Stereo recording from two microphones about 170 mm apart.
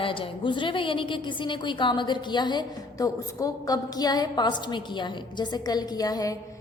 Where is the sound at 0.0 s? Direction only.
30° left (ahead or behind).